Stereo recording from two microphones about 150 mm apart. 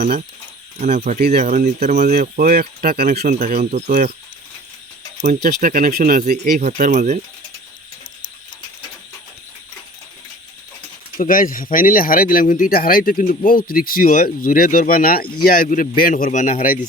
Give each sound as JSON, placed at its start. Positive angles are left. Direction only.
{"t": 0.8, "sound": "speech", "side_deg": -50}
{"t": 2.1, "sound": "speech", "side_deg": -70}
{"t": 3.4, "sound": "speech", "side_deg": -90}
{"t": 3.8, "sound": "speech", "side_deg": -60}
{"t": 5.2, "sound": "speech", "side_deg": -75}
{"t": 6.6, "sound": "speech", "side_deg": -60}
{"t": 11.2, "sound": "speech", "side_deg": 65}